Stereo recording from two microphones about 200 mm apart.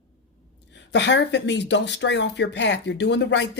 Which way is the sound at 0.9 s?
60° left (ahead or behind).